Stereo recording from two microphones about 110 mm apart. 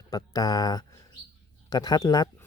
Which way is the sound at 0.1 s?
35° left (ahead or behind).